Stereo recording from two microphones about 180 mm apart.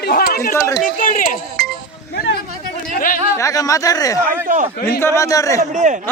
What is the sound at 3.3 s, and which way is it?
Speech, 20° left (ahead or behind).